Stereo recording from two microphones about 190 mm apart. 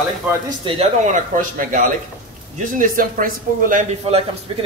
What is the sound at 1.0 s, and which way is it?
Speech, 45° right (ahead or behind).